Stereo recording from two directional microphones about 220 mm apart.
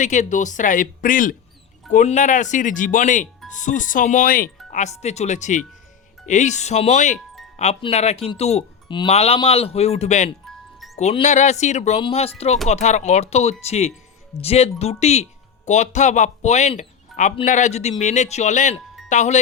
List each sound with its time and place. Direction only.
0.0 s speech: 35° left (ahead or behind)